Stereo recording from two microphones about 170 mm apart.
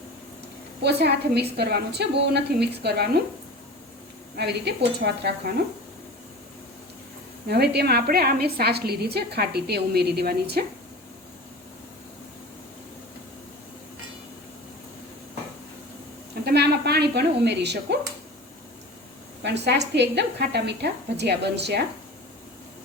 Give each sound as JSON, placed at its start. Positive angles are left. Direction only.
{"t": 0.8, "sound": "a woman's voice", "side_deg": -75}
{"t": 4.4, "sound": "a woman's voice", "side_deg": -75}
{"t": 7.4, "sound": "a woman's voice", "side_deg": -75}
{"t": 16.3, "sound": "a sound", "side_deg": -70}
{"t": 19.4, "sound": "a woman's voice", "side_deg": -90}